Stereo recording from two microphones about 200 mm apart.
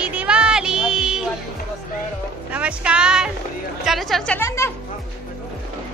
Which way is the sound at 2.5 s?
5° right (ahead or behind).